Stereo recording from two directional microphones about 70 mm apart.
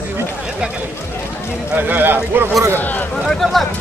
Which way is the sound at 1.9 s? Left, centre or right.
Right.